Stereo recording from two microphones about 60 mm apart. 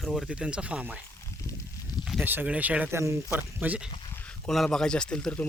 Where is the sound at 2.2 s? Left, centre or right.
Right.